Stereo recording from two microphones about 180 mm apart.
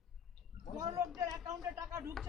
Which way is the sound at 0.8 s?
20° right (ahead or behind).